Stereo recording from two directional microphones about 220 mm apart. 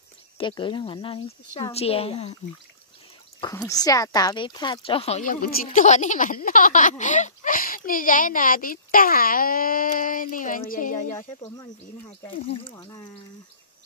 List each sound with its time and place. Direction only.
0.4 s a woman's voice: 20° left (ahead or behind)
3.3 s speech: 15° left (ahead or behind); by 11.0 s 35° left (ahead or behind)
12.3 s a woman's voice: 25° left (ahead or behind)